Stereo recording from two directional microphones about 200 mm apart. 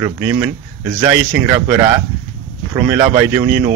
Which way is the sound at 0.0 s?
10° right (ahead or behind).